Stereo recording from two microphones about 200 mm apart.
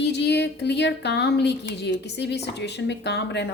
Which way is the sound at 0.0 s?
55° left (ahead or behind).